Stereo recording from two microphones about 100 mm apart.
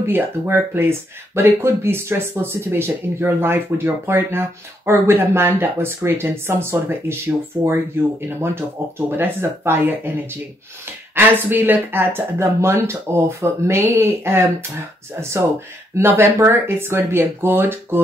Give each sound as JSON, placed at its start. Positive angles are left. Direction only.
{"t": 0.0, "sound": "speech", "side_deg": -25}
{"t": 11.1, "sound": "speech", "side_deg": -20}
{"t": 16.0, "sound": "speech", "side_deg": -25}